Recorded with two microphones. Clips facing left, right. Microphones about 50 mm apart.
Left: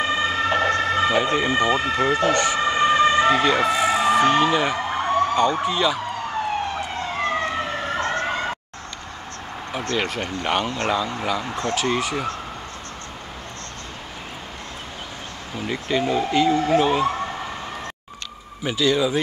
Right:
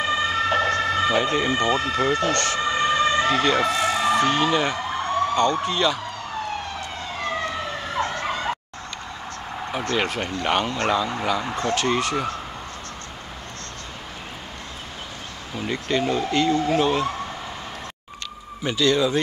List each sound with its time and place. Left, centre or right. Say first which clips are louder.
0.0 s emergency vehicle: left 1 dB; centre
0.8 s speech: left 1 dB; centre
7.2 s emergency vehicle: left 3 dB; left
8.0 s emergency vehicle: even; left
9.9 s speech: even; centre
15.5 s speech: even; centre
18.6 s speech: even; centre